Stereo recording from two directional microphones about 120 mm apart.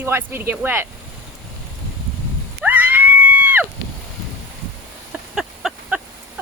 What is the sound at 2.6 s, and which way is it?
Screaming, 15° right (ahead or behind).